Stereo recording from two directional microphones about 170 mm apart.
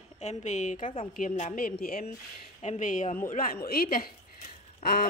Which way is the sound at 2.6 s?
45° left (ahead or behind).